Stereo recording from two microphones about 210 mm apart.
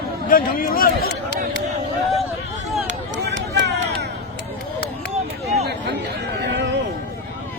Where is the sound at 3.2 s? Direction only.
55° right (ahead or behind).